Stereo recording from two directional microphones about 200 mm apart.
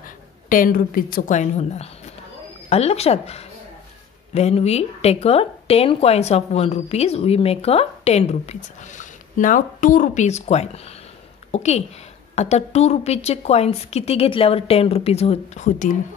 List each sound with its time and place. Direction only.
0.5 s a woman's voice: 45° left (ahead or behind)